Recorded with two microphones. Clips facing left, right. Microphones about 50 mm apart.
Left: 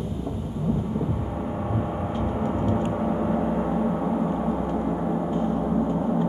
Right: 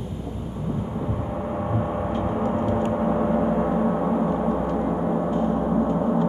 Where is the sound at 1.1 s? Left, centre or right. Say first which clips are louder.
Right 2 dB; centre.